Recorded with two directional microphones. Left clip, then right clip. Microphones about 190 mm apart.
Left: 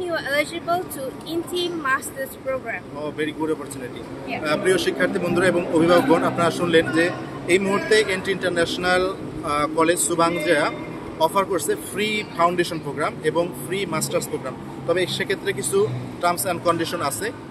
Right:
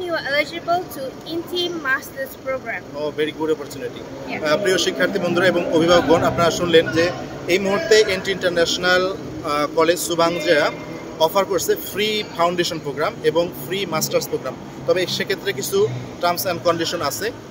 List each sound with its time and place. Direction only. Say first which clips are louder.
0.0 s speech: right 2 dB; 15° left (ahead or behind)
3.0 s a man's voice: right 4 dB; 15° right (ahead or behind)